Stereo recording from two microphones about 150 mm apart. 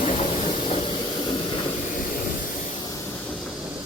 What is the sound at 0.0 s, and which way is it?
Train, 45° left (ahead or behind).